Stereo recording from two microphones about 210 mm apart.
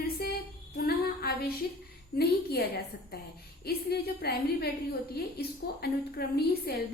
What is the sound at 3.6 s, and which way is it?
A woman's voice, 50° left (ahead or behind).